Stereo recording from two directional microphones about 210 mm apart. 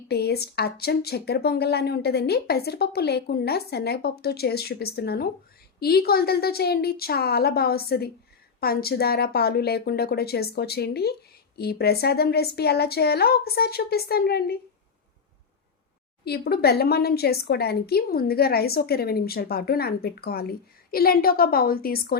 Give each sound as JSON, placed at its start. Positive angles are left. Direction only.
{"t": 0.1, "sound": "a woman's voice", "side_deg": 50}
{"t": 16.2, "sound": "a woman's voice", "side_deg": 50}